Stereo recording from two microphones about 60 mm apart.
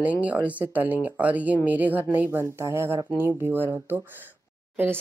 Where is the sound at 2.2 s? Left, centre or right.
Right.